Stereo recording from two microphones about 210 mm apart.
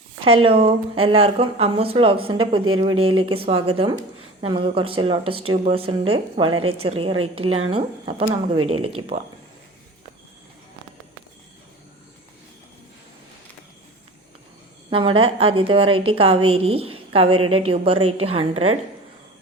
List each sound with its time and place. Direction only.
0.3 s a woman's voice: 25° right (ahead or behind)
8.5 s speech: 90° right
9.1 s speech: 40° right (ahead or behind)
14.8 s a woman's voice: 25° right (ahead or behind)